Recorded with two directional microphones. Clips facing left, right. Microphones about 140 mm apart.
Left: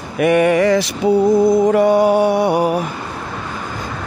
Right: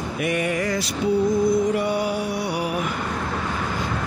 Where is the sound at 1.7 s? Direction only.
45° left (ahead or behind).